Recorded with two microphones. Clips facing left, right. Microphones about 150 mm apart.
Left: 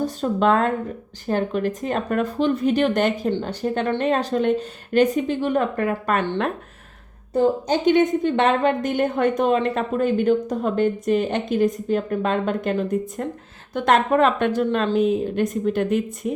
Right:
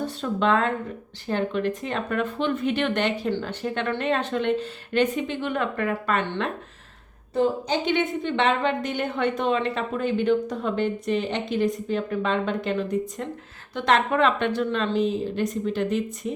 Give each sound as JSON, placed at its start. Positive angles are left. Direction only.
{"t": 0.0, "sound": "a woman's voice", "side_deg": 45}
{"t": 7.7, "sound": "a woman's voice", "side_deg": 45}